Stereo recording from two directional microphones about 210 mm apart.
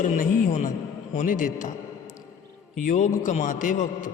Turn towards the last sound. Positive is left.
turn(degrees=40)  # may be behind; listen again after turning